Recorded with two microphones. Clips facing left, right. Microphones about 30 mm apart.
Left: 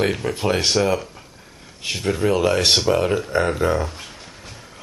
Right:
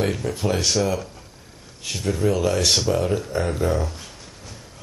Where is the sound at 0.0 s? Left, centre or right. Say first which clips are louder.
Left 3 dB; left.